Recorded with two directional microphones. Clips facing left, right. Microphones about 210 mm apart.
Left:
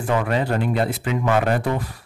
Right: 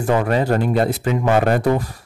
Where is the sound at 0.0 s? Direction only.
40° right (ahead or behind).